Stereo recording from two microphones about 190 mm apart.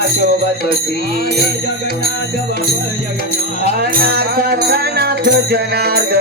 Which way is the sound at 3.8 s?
55° right (ahead or behind).